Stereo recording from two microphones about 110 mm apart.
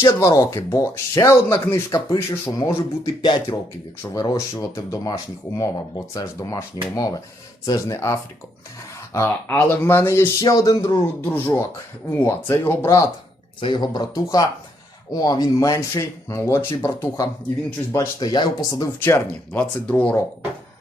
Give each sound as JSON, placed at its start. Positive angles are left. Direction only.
{"t": 0.0, "sound": "speech", "side_deg": 30}
{"t": 3.2, "sound": "speech", "side_deg": 40}
{"t": 10.4, "sound": "speech", "side_deg": 35}
{"t": 13.6, "sound": "speech", "side_deg": 45}
{"t": 17.9, "sound": "speech", "side_deg": 30}
{"t": 18.9, "sound": "speech", "side_deg": 20}